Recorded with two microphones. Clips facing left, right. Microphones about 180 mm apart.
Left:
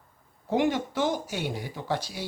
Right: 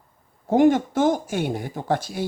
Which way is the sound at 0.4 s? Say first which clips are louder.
Right 8 dB; 45° right (ahead or behind).